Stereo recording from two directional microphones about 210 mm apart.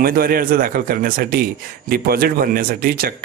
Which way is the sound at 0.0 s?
45° right (ahead or behind).